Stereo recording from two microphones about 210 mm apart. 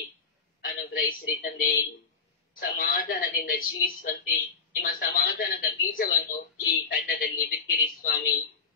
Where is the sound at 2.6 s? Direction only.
40° left (ahead or behind).